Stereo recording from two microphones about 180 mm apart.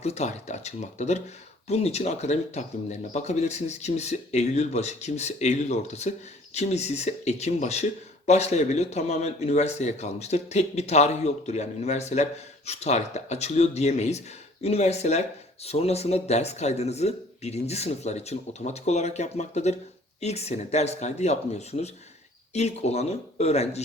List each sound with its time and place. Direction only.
0.0 s speech: 40° left (ahead or behind)